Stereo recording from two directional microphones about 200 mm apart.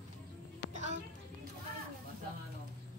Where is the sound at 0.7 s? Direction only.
35° right (ahead or behind).